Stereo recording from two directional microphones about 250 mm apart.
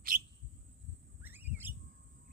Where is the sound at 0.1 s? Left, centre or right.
Right.